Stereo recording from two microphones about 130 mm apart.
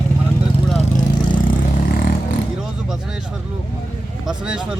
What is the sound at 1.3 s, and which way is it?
Vehicle, 90° left.